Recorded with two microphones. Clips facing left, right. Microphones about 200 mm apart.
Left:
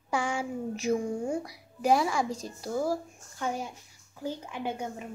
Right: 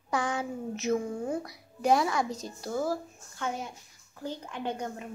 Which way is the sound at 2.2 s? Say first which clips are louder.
Left 1 dB; 30° left (ahead or behind).